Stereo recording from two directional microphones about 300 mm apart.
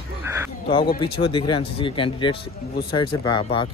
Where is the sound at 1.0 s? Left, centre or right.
Centre.